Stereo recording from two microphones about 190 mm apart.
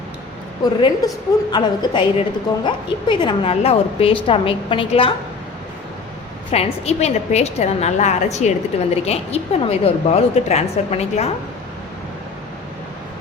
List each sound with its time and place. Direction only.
0.6 s a woman's voice: 20° left (ahead or behind)
6.5 s a woman's voice: 35° left (ahead or behind)